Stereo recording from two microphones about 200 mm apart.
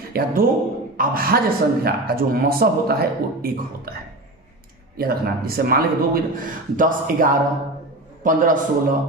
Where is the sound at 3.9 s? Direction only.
50° right (ahead or behind).